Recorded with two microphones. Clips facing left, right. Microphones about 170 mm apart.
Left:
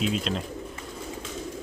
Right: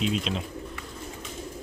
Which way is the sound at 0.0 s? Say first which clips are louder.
Left 1 dB; centre (ahead or behind).